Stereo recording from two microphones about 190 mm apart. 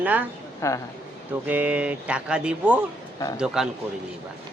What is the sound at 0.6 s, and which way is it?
Speech, 15° left (ahead or behind).